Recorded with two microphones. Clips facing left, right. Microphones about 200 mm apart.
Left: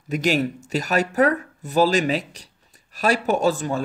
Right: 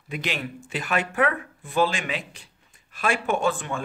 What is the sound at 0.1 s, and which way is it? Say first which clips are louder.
Speech: left 9 dB; 45° left (ahead or behind).